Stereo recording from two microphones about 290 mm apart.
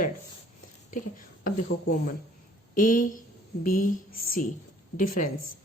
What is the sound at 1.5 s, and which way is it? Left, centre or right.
Speech, left.